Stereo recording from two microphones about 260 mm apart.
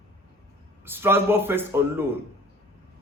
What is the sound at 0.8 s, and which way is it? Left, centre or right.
A man's voice, centre.